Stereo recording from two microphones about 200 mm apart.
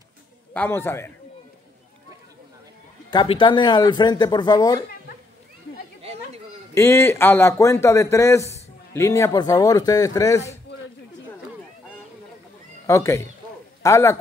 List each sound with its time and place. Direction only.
0.5 s speech: 10° left (ahead or behind)
3.1 s speech: 25° left (ahead or behind)
6.7 s speech: 10° left (ahead or behind)
12.8 s speech: 15° left (ahead or behind)